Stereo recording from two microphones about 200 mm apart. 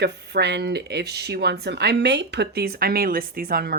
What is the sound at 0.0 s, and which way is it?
Speech, 55° right (ahead or behind).